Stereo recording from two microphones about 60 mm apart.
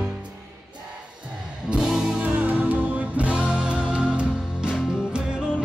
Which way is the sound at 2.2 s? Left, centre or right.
Right.